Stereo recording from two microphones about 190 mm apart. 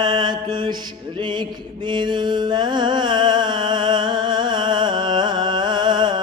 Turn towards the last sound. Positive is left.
turn(degrees=-25)  # may be behind; listen again after turning